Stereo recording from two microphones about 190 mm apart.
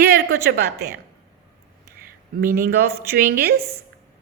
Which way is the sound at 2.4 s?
50° right (ahead or behind).